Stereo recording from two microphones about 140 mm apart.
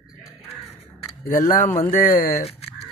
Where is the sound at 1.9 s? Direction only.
90° left.